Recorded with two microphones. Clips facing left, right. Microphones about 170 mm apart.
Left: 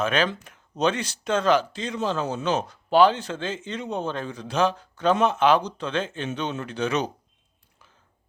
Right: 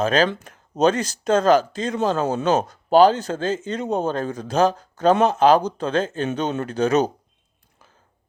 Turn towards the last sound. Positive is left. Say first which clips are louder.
# right 7 dB
turn(degrees=-45)  # may be behind; listen again after turning